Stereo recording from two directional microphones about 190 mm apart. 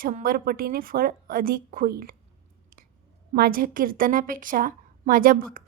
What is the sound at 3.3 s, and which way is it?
A woman's voice, 50° right (ahead or behind).